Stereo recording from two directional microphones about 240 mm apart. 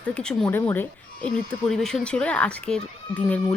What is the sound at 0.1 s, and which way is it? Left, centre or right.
Speech, centre.